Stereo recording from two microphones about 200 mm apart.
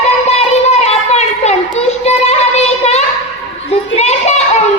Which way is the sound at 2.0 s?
30° left (ahead or behind).